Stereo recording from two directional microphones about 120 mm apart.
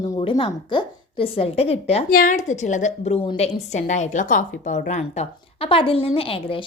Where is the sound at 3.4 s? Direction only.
75° left (ahead or behind).